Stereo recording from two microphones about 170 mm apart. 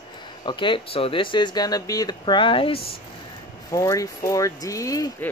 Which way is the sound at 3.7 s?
20° left (ahead or behind).